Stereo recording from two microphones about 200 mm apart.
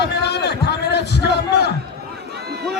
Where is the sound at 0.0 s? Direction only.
55° left (ahead or behind).